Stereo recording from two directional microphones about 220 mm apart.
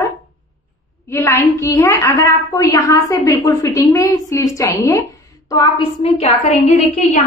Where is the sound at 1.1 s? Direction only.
10° left (ahead or behind); by 7.2 s 30° left (ahead or behind).